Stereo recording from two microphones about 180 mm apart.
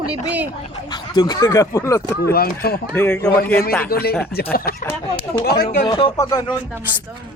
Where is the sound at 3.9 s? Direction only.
55° left (ahead or behind).